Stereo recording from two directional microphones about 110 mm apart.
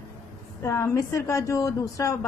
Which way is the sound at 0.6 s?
25° left (ahead or behind).